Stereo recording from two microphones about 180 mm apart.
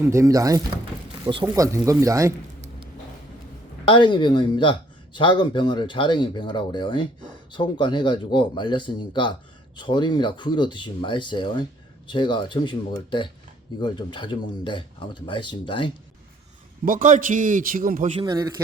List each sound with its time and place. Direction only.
0.0 s speech: 15° right (ahead or behind)
3.8 s speech: 25° left (ahead or behind)
16.8 s a man's voice: 50° right (ahead or behind)
18.2 s speech: 20° right (ahead or behind)